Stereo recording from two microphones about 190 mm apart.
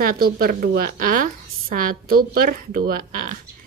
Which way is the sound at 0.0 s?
50° right (ahead or behind).